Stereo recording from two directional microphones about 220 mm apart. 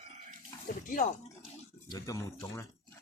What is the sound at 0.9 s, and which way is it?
Speech, 40° left (ahead or behind).